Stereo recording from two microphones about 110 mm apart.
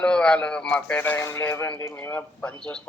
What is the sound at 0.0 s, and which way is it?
A man's voice, 10° left (ahead or behind).